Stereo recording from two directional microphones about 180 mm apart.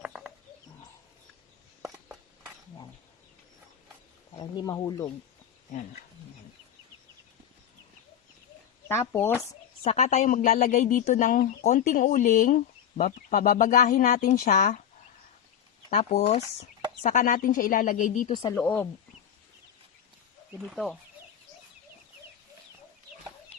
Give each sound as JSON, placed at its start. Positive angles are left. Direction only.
{"t": 0.0, "sound": "bird", "side_deg": -5}
{"t": 1.8, "sound": "a sound", "side_deg": -10}
{"t": 4.4, "sound": "speech", "side_deg": 20}
{"t": 8.9, "sound": "speech", "side_deg": 15}
{"t": 9.8, "sound": "speech", "side_deg": 40}
{"t": 15.9, "sound": "speech", "side_deg": 35}
{"t": 18.5, "sound": "speech", "side_deg": 10}
{"t": 20.5, "sound": "speech", "side_deg": -10}
{"t": 20.7, "sound": "speech", "side_deg": 0}